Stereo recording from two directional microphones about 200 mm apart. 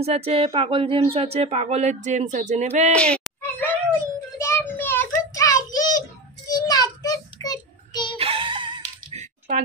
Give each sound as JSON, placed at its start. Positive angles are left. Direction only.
{"t": 0.0, "sound": "speech", "side_deg": -30}
{"t": 2.9, "sound": "a sound", "side_deg": 5}
{"t": 4.4, "sound": "child singing", "side_deg": 15}
{"t": 8.2, "sound": "music", "side_deg": -25}